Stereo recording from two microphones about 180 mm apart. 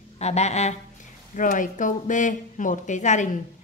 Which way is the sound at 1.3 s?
45° left (ahead or behind).